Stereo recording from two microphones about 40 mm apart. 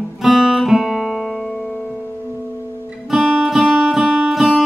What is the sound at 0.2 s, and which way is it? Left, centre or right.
Guitar, centre.